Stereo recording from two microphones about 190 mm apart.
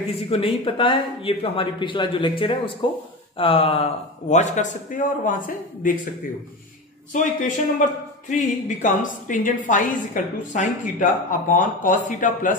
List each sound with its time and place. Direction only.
0.0 s a man's voice: 30° left (ahead or behind)
7.1 s a man's voice: 40° left (ahead or behind)